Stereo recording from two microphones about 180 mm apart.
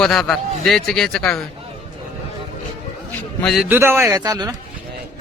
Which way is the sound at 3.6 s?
10° right (ahead or behind).